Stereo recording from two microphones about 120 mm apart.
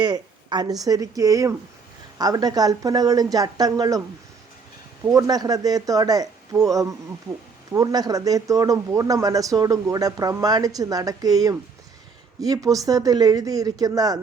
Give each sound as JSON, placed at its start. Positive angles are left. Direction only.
{"t": 0.0, "sound": "a woman's voice", "side_deg": -35}
{"t": 5.0, "sound": "speech", "side_deg": -30}